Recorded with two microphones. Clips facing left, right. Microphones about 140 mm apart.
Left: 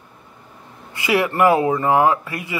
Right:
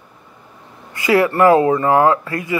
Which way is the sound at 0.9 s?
20° left (ahead or behind).